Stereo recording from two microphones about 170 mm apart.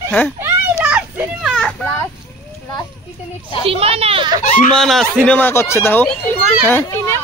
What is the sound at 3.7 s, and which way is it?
Speech, 35° right (ahead or behind).